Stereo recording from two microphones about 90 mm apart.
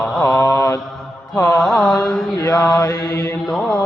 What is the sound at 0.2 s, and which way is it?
Mantra, 40° left (ahead or behind).